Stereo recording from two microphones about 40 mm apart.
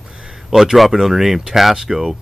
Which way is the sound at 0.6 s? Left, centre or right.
Centre.